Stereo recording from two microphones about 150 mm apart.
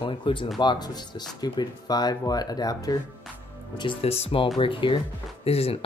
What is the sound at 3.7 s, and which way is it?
Speech, 35° left (ahead or behind).